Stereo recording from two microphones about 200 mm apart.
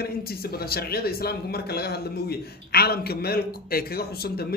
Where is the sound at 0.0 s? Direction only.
50° left (ahead or behind).